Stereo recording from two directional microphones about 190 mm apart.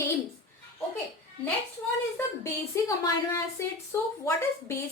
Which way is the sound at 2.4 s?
15° left (ahead or behind).